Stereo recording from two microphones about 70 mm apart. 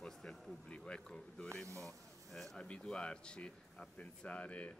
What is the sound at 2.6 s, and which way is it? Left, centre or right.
Speech, centre.